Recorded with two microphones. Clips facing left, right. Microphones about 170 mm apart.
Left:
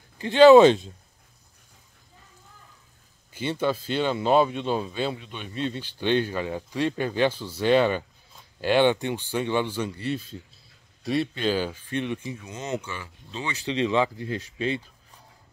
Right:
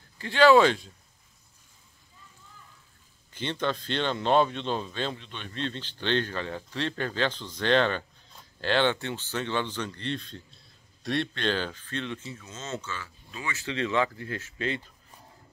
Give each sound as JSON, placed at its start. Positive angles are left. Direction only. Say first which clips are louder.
{"t": 0.2, "sound": "speech", "louder": "left 6 dB", "side_deg": 20}
{"t": 3.3, "sound": "speech", "louder": "left 4 dB", "side_deg": 10}